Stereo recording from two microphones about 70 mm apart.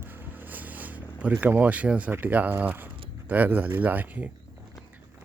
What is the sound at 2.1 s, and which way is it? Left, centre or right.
Speech, right.